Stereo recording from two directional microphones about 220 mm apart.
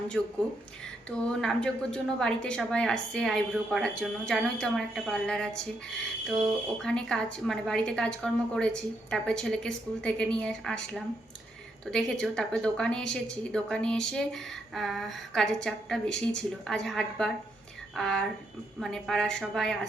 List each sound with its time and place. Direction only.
0.1 s speech: 5° left (ahead or behind)
6.8 s speech: 5° left (ahead or behind)